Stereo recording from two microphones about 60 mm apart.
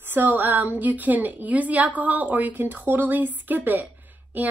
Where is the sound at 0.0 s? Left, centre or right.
Right.